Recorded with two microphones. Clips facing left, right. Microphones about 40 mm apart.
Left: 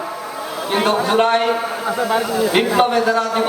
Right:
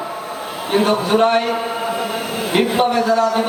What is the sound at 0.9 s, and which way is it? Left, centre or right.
Speech, left.